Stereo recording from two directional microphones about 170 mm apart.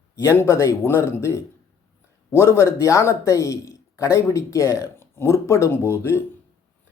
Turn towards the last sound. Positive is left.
turn(degrees=15)  # may be behind; listen again after turning